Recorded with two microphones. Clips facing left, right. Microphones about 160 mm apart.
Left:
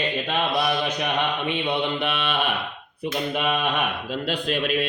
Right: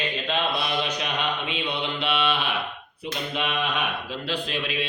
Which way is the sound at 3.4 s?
50° left (ahead or behind).